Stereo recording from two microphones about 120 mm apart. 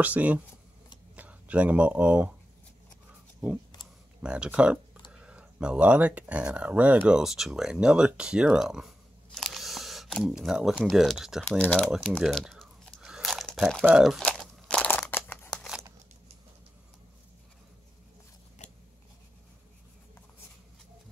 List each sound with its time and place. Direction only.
0.0 s speech: 15° right (ahead or behind)
4.2 s speech: 10° right (ahead or behind)
11.4 s speech: 10° left (ahead or behind)
12.2 s crunch: centre (ahead or behind)
13.8 s speech: 5° right (ahead or behind)
14.2 s crunch: 5° left (ahead or behind)
14.9 s crumpling: 15° left (ahead or behind)
15.5 s crumpling: centre (ahead or behind)